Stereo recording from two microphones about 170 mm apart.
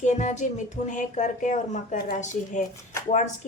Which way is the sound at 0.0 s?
45° left (ahead or behind).